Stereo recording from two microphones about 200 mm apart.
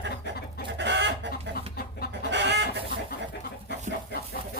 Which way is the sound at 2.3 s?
60° right (ahead or behind).